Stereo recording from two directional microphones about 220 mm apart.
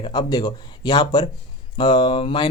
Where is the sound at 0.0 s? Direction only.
20° left (ahead or behind).